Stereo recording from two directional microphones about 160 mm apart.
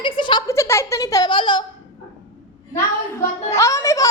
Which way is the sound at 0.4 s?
15° left (ahead or behind).